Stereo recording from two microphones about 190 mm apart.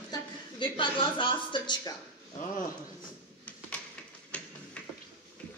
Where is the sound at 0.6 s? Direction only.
25° left (ahead or behind).